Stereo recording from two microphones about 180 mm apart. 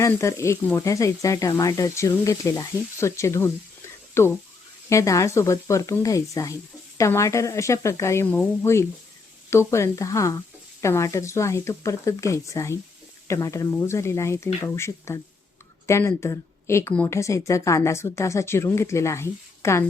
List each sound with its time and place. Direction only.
0.0 s a woman's voice: 15° left (ahead or behind)